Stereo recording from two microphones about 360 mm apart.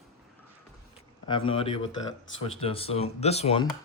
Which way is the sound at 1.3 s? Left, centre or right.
Centre.